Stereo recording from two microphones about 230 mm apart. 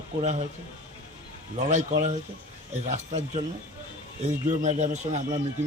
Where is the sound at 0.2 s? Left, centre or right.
Right.